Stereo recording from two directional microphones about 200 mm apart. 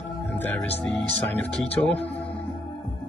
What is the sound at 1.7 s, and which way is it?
Speech, 30° left (ahead or behind).